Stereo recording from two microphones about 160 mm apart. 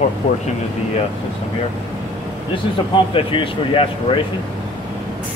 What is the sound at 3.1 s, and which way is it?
Speech, 35° left (ahead or behind).